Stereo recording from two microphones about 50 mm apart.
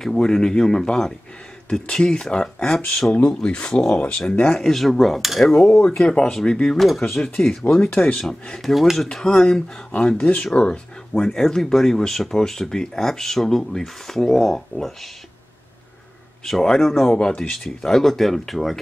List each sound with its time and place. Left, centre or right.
0.0 s speech: centre
4.5 s speech: centre
5.5 s speech: centre
7.6 s speech: left
8.2 s speech: centre
8.6 s speech: centre; by 11.2 s left
11.2 s speech: centre
16.4 s speech: centre